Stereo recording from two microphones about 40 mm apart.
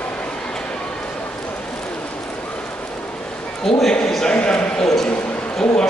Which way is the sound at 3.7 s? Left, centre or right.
Centre.